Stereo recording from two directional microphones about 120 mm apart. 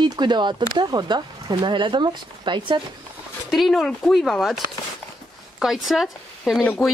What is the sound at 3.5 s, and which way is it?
Speech, centre (ahead or behind).